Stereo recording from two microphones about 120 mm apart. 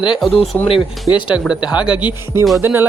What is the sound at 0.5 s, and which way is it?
Speech, 10° left (ahead or behind).